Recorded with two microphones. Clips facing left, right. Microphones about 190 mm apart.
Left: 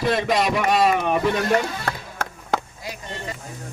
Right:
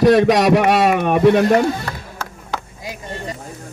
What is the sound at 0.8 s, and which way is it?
Speech, 45° right (ahead or behind).